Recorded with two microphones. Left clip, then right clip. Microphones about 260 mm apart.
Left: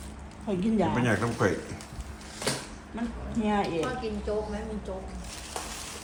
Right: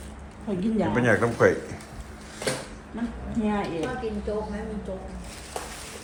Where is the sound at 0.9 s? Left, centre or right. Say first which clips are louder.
Right 5 dB; centre.